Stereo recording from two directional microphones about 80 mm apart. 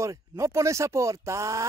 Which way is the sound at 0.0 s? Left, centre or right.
Right.